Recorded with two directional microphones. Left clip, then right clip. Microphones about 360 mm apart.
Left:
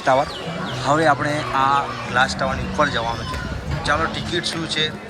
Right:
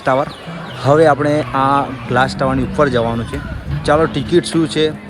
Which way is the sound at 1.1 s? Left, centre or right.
Right.